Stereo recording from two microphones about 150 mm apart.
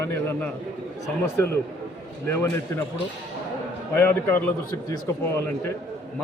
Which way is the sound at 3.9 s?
15° left (ahead or behind).